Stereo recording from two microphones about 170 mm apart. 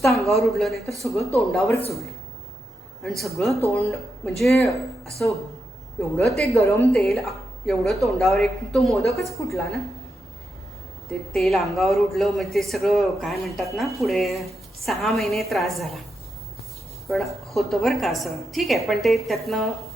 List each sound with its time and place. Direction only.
0.0 s a man's voice: centre (ahead or behind)
3.0 s a man's voice: centre (ahead or behind)
6.5 s a woman's voice: 15° left (ahead or behind)
6.9 s a man's voice: centre (ahead or behind)
11.3 s a man's voice: centre (ahead or behind)
17.1 s a man's voice: centre (ahead or behind)